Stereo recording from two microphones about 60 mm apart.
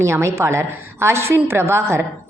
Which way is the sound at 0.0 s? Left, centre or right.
Right.